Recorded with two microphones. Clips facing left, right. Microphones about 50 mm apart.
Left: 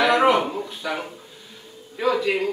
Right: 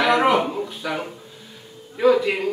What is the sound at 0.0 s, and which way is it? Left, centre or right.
A man's voice, centre.